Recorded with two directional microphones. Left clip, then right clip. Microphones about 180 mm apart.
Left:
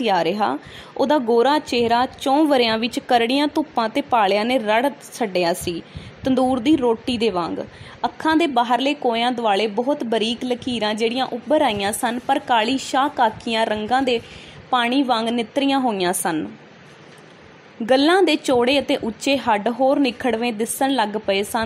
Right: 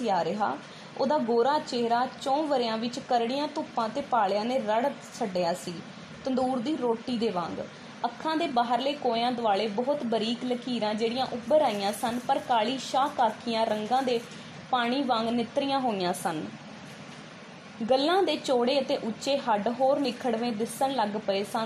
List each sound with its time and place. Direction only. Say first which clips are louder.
0.0 s speech: left 8 dB; 25° left (ahead or behind)
17.8 s speech: left 8 dB; 25° left (ahead or behind)